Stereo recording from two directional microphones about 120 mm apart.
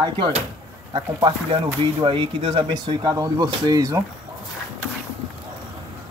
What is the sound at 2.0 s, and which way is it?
Speech, 40° right (ahead or behind).